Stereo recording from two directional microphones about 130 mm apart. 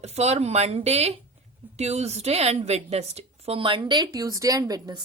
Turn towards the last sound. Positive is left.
turn(degrees=-30)  # may be behind; listen again after turning